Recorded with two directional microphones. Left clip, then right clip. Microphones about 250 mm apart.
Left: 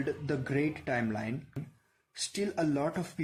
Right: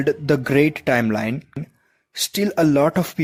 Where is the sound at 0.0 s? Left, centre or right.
Right.